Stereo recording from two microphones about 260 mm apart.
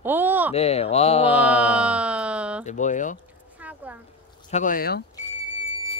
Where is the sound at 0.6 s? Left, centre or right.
Left.